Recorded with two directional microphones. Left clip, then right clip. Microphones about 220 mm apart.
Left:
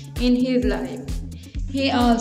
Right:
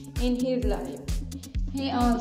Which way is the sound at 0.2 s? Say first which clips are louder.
Left 6 dB; 10° left (ahead or behind).